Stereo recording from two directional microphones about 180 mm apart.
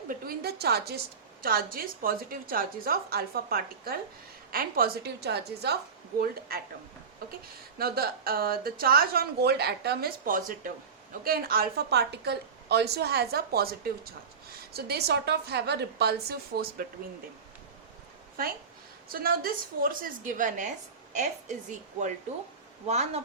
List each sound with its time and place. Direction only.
0.1 s a woman's voice: 60° right (ahead or behind)
7.8 s a woman's voice: 55° right (ahead or behind)
19.0 s a woman's voice: 55° right (ahead or behind)
22.9 s speech: 35° right (ahead or behind)